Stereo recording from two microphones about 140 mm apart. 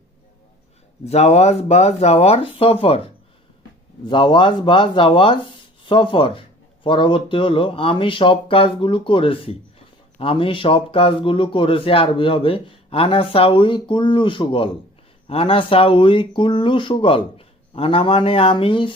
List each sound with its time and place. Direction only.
1.0 s speech: 50° left (ahead or behind)